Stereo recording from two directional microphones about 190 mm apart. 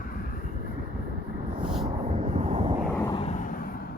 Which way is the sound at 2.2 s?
35° right (ahead or behind).